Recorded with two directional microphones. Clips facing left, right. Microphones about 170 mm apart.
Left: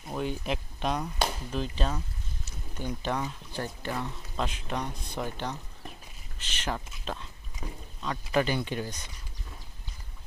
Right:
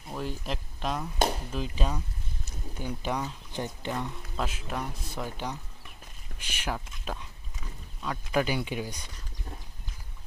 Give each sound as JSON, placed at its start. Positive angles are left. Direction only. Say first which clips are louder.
{"t": 0.1, "sound": "speech", "louder": "left 3 dB", "side_deg": 0}
{"t": 4.0, "sound": "speech", "louder": "even", "side_deg": -5}